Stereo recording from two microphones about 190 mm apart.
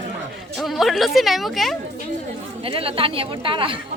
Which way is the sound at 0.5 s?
Centre (ahead or behind).